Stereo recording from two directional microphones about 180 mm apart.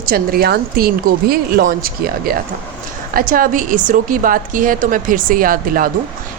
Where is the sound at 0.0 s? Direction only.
55° right (ahead or behind).